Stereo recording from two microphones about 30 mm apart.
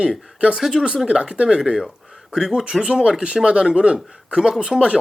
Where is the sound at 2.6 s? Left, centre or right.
Right.